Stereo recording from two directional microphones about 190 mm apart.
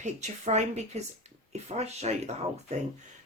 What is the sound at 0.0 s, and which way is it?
Speech, 35° right (ahead or behind).